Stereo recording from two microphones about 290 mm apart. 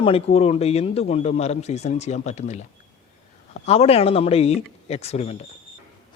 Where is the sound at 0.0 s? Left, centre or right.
Centre.